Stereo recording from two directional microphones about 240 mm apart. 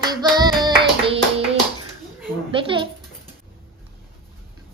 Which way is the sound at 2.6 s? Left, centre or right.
Right.